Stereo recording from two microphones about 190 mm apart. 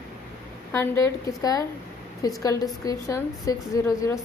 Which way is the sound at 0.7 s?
15° left (ahead or behind).